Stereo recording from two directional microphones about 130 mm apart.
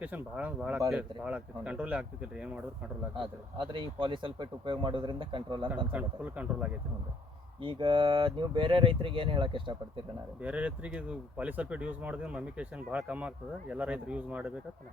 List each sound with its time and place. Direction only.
0.0 s speech: 10° right (ahead or behind)
3.2 s speech: 40° right (ahead or behind)
5.9 s speech: 10° right (ahead or behind)
7.6 s speech: 40° right (ahead or behind)
10.4 s speech: 10° right (ahead or behind)